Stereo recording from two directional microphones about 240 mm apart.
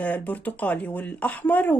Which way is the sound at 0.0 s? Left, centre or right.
Centre.